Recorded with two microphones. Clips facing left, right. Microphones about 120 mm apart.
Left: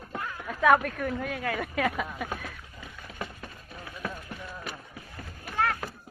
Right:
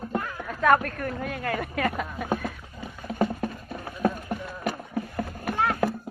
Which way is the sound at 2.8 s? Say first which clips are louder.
Right 13 dB; 40° right (ahead or behind).